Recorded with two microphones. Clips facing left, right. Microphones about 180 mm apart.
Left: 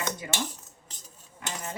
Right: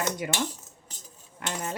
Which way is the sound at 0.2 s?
70° right (ahead or behind).